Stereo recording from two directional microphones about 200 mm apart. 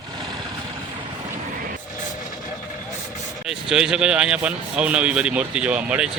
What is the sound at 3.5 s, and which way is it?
Speech, 5° right (ahead or behind).